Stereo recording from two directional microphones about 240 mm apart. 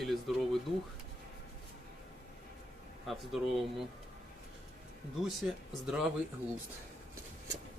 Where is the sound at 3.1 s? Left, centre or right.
Centre.